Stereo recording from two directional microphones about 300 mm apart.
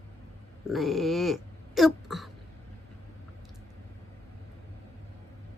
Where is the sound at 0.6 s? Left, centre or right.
Centre.